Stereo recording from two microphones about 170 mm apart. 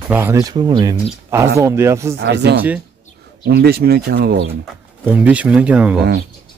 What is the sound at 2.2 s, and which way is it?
Speech, 80° right.